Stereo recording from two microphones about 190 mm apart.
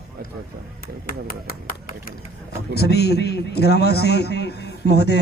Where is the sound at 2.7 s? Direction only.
55° left (ahead or behind).